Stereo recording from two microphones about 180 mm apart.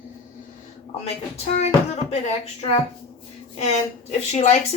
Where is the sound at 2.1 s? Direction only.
35° left (ahead or behind).